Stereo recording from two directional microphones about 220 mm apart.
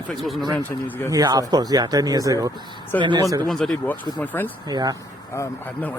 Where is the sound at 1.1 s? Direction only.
15° right (ahead or behind).